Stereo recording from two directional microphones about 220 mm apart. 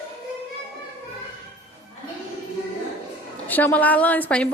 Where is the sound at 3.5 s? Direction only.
10° left (ahead or behind).